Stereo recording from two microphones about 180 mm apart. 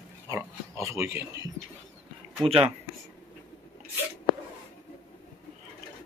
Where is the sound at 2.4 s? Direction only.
30° right (ahead or behind).